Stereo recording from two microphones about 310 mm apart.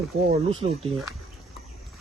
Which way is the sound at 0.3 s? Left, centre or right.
Centre.